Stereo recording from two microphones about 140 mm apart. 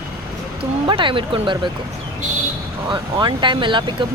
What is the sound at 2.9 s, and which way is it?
Vehicle, 35° right (ahead or behind).